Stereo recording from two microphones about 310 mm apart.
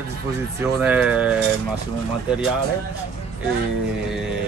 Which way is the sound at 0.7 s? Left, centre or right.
Centre.